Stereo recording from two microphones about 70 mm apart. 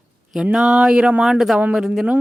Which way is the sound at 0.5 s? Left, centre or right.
Centre.